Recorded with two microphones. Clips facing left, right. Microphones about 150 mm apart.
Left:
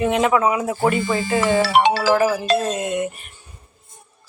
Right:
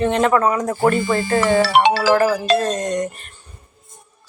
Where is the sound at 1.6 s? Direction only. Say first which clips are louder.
Right 1 dB; 90° right.